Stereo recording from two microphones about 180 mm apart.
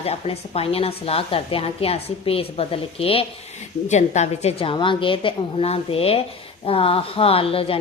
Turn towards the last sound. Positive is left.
turn(degrees=30)  # may be behind; listen again after turning